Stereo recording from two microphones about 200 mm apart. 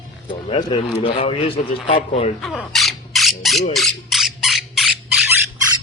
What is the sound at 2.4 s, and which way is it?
Squawk, centre (ahead or behind).